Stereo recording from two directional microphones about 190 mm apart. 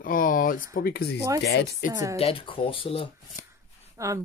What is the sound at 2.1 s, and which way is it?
Speech, 30° left (ahead or behind).